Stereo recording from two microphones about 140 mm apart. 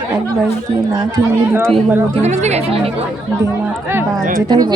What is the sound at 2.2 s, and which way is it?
Speech, 55° right (ahead or behind).